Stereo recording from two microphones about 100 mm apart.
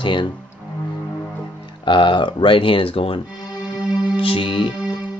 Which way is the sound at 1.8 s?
50° left (ahead or behind).